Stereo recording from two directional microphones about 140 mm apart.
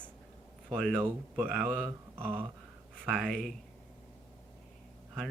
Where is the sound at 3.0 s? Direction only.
5° left (ahead or behind).